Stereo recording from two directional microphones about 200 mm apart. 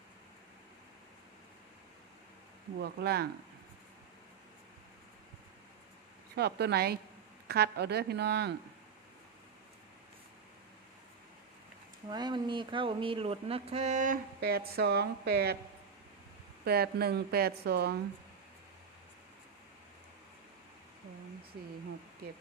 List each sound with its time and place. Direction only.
2.8 s speech: 55° right (ahead or behind)
6.3 s a woman's voice: 55° right (ahead or behind)
12.0 s speech: 20° right (ahead or behind); by 15.5 s 50° right (ahead or behind)
16.6 s speech: 50° right (ahead or behind)